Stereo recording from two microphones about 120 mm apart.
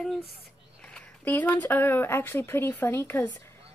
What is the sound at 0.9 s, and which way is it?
A woman's voice, 15° left (ahead or behind).